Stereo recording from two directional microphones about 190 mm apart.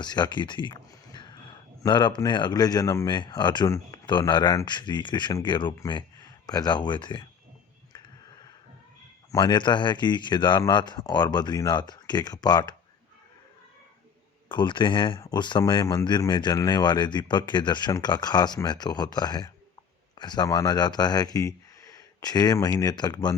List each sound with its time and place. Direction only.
0.0 s a man's voice: 25° left (ahead or behind)
9.3 s speech: 25° left (ahead or behind)
14.5 s speech: 25° left (ahead or behind)